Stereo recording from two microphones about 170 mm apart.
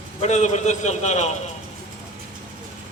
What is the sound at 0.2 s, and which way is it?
Speech, 45° left (ahead or behind).